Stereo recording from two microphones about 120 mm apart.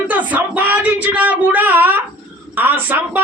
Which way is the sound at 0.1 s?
15° right (ahead or behind).